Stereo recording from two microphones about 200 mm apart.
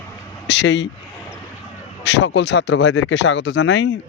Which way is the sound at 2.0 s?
60° left (ahead or behind).